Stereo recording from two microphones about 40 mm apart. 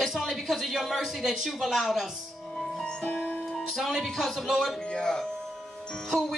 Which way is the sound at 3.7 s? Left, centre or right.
Centre.